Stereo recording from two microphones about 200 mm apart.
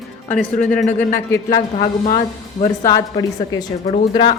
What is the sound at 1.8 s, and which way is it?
Speech, 40° left (ahead or behind).